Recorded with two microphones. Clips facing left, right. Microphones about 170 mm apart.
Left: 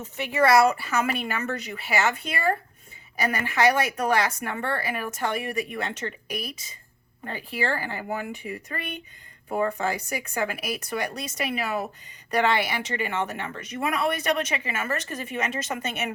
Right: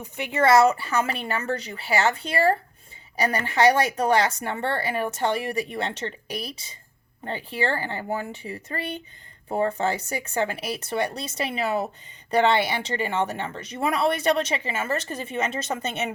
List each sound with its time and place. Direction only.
0.0 s speech: 20° right (ahead or behind)